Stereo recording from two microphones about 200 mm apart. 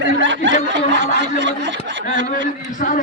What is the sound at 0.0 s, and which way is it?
Snicker, 70° right (ahead or behind).